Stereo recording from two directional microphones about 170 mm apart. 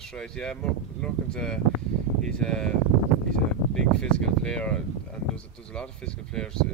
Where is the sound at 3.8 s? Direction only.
5° left (ahead or behind).